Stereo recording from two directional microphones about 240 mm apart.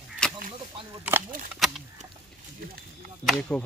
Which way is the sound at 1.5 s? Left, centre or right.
Centre.